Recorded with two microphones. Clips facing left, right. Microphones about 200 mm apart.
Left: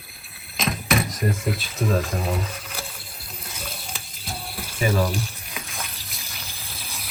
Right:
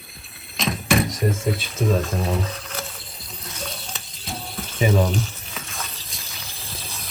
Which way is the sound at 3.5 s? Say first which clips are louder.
Right 3 dB; 5° left (ahead or behind).